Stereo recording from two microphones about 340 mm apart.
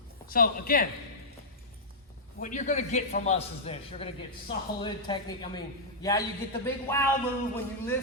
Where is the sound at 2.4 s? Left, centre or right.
Left.